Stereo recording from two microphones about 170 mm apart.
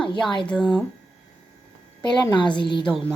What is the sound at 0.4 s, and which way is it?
Speech, 5° left (ahead or behind).